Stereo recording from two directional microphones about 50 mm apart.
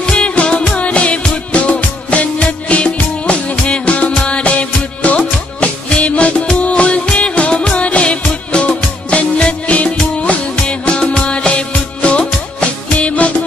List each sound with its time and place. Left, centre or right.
0.0 s music: left